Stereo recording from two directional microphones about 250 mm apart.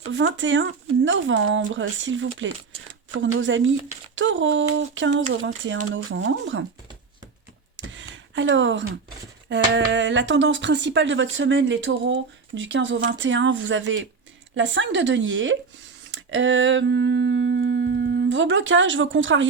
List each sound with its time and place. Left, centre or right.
0.1 s speech: right
7.9 s a sound: right
9.5 s speech: right
16.1 s humming: right